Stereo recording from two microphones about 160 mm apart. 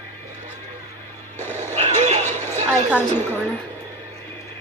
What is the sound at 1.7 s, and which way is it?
Vehicle, 45° right (ahead or behind).